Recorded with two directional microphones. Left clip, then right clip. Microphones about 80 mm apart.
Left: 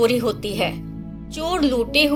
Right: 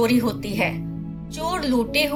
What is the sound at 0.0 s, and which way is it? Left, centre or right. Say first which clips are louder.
A woman's voice: left 3 dB; left.